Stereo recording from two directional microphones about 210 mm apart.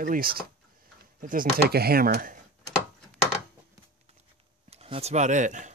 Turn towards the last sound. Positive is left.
turn(degrees=-35)  # may be behind; listen again after turning